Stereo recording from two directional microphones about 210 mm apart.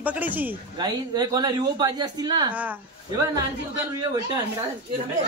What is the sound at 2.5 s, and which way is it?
Speech, 10° right (ahead or behind).